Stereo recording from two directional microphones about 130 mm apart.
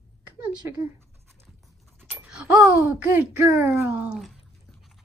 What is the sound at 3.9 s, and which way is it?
Speech, 5° right (ahead or behind).